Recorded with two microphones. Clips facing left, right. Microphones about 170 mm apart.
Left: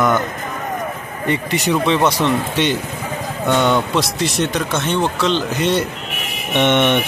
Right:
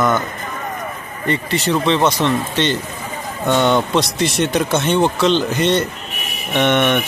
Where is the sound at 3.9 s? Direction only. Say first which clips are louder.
Right 1 dB; centre (ahead or behind).